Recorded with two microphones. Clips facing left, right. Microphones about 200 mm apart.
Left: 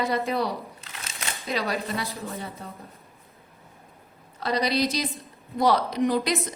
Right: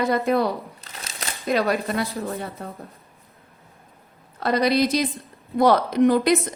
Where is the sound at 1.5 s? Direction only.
55° right (ahead or behind).